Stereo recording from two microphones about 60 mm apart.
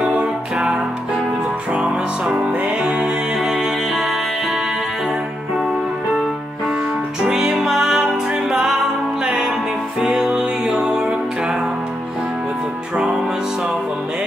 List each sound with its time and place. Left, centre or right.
0.0 s music: centre
7.2 s music: centre
12.9 s music: centre